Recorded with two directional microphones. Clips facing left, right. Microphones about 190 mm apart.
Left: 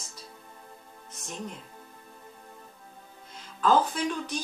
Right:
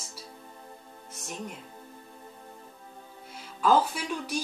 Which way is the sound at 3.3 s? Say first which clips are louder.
Even; 10° right (ahead or behind).